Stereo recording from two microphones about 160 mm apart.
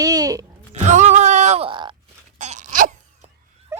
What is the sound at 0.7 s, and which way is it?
Music, 45° right (ahead or behind).